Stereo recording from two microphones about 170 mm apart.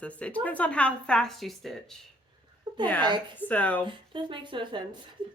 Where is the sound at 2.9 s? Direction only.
25° right (ahead or behind).